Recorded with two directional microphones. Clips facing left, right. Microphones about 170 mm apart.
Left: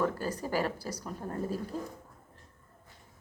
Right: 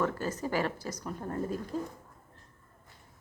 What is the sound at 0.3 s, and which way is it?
Speech, 40° left (ahead or behind).